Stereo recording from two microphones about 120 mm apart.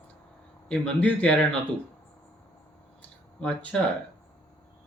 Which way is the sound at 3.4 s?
10° left (ahead or behind).